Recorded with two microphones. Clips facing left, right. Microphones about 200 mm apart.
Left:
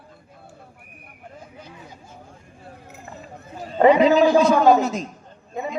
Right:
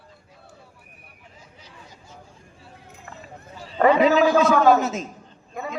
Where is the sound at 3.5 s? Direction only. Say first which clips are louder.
Left 9 dB; 50° left (ahead or behind).